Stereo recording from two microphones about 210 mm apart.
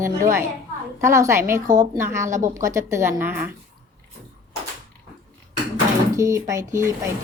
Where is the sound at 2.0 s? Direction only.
15° right (ahead or behind).